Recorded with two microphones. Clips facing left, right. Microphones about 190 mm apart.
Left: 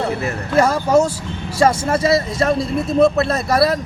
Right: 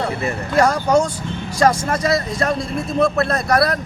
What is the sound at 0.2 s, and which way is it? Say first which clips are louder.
A man's voice: right 1 dB; 5° left (ahead or behind).